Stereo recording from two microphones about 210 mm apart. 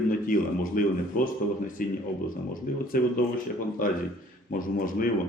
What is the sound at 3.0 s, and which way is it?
Speech, 45° left (ahead or behind).